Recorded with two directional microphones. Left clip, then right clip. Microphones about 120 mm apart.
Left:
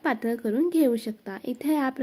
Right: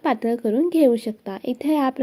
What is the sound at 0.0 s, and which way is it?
A woman's voice, 20° right (ahead or behind).